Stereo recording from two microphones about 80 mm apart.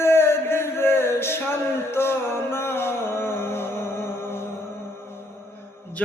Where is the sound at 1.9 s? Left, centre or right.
Left.